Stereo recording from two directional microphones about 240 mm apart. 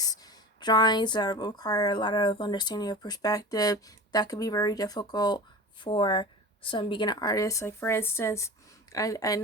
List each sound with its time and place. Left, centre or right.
0.0 s speech: centre